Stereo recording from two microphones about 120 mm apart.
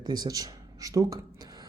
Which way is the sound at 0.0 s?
35° right (ahead or behind).